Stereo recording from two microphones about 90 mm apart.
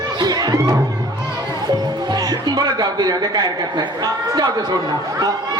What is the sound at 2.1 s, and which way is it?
Speech, 50° right (ahead or behind).